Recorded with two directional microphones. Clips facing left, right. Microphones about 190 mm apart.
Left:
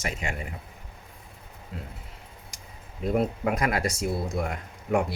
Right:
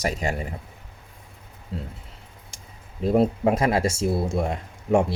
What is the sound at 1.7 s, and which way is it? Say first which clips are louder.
Speech: right 6 dB; 30° right (ahead or behind).